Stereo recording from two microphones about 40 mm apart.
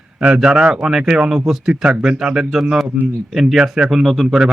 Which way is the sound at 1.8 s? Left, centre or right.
Right.